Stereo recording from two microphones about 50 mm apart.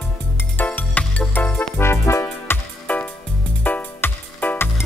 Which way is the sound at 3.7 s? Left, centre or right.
Left.